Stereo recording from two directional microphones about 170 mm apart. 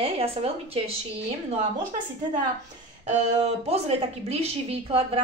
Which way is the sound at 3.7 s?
35° right (ahead or behind).